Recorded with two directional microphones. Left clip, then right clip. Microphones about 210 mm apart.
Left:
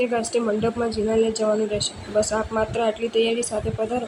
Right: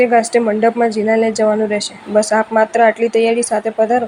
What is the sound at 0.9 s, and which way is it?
A woman's voice, 25° right (ahead or behind).